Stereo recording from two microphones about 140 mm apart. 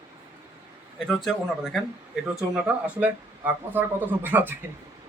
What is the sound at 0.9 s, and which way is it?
Speech, centre (ahead or behind).